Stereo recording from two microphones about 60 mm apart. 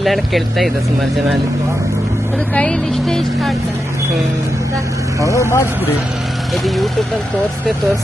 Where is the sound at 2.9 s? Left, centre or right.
Centre.